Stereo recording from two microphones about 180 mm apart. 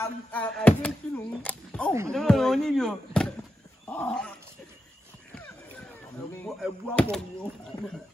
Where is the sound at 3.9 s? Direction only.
5° left (ahead or behind).